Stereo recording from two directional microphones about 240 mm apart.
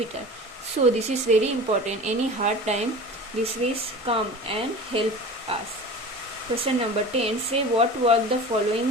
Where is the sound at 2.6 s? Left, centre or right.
Right.